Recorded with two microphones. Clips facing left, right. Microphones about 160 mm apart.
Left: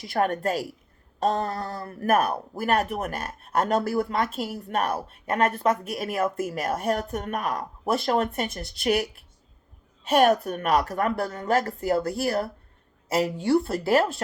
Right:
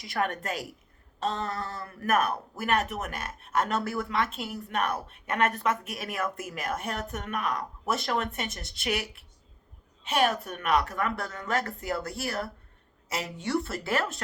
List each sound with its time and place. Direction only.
0.1 s speech: 35° left (ahead or behind)